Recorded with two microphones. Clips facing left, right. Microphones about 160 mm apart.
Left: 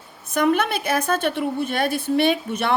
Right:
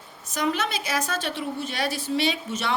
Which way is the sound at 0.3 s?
55° left (ahead or behind).